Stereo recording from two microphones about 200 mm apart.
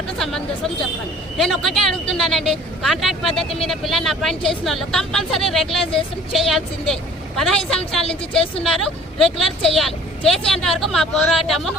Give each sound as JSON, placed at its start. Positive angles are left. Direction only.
{"t": 0.2, "sound": "speech", "side_deg": 0}
{"t": 8.0, "sound": "a woman's voice", "side_deg": 30}
{"t": 8.7, "sound": "speech", "side_deg": 0}